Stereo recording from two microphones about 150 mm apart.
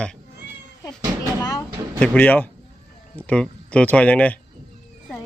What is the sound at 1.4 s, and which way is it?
Speech, 25° left (ahead or behind).